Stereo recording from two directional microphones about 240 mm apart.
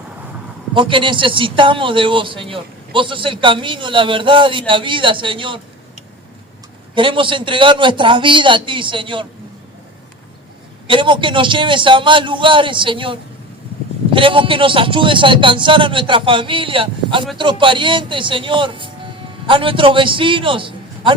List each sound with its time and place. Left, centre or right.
0.7 s speech: right
6.9 s speech: right
10.8 s speech: right